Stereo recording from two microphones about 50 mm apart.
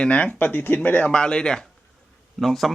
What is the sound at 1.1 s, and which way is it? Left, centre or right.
Speech, centre.